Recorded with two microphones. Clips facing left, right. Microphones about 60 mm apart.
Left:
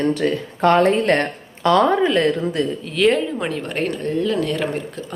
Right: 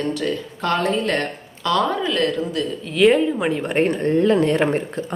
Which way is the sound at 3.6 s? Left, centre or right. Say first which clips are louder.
Right 4 dB; right.